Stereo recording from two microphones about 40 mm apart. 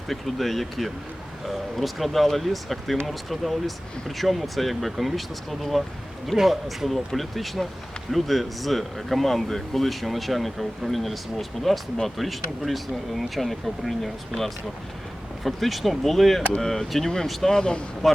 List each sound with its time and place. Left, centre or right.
0.1 s speech: centre
17.6 s speech: left
18.0 s speech: centre